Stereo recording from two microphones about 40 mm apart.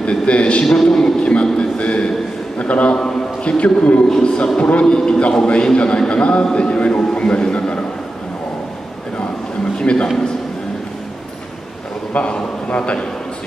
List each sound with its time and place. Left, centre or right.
0.0 s a man's voice: left
0.8 s a sound: centre
2.6 s a man's voice: left
4.1 s a man's voice: left
4.6 s a man's voice: left
4.8 s a man's voice: centre
9.8 s a sound: left
12.1 s a man's voice: left